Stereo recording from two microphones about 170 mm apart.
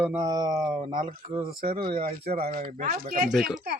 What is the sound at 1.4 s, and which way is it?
Speech, 60° right (ahead or behind).